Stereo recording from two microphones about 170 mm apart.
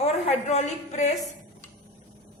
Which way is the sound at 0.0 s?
40° left (ahead or behind).